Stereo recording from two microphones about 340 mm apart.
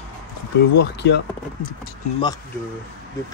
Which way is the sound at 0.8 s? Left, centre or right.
Left.